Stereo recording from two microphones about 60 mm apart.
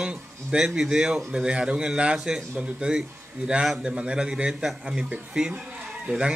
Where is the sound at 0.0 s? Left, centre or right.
Centre.